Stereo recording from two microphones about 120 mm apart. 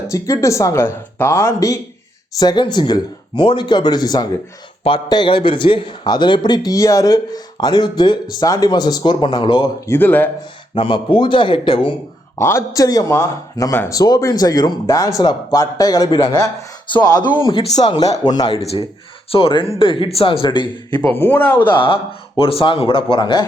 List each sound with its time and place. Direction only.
0.1 s a man's voice: 25° left (ahead or behind)
9.8 s speech: 20° left (ahead or behind)
10.8 s speech: 45° left (ahead or behind)
12.4 s a man's voice: 25° left (ahead or behind)
19.3 s speech: 50° left (ahead or behind)
21.1 s speech: 15° left (ahead or behind)
21.6 s speech: 40° left (ahead or behind)